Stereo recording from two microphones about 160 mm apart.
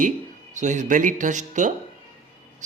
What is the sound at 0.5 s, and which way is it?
Speech, 50° right (ahead or behind).